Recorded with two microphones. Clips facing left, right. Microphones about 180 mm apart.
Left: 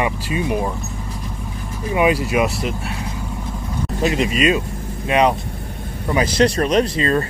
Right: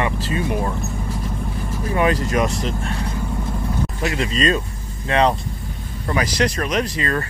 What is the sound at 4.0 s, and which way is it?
Speech, 20° left (ahead or behind).